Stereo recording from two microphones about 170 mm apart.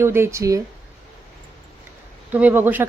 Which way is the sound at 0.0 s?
15° right (ahead or behind).